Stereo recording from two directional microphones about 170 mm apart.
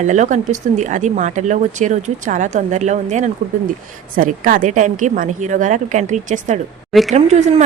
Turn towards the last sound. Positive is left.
turn(degrees=-45)  # may be behind; listen again after turning